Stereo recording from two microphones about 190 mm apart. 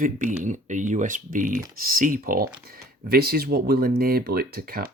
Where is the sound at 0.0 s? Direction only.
45° right (ahead or behind).